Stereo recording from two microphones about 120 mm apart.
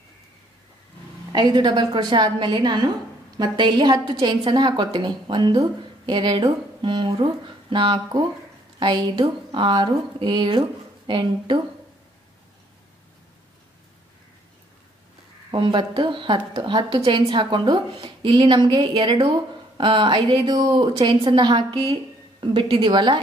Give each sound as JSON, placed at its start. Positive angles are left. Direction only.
{"t": 1.3, "sound": "a woman's voice", "side_deg": -35}
{"t": 15.5, "sound": "a woman's voice", "side_deg": -40}